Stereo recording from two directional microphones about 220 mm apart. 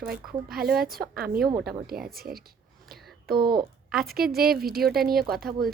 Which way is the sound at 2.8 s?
45° right (ahead or behind).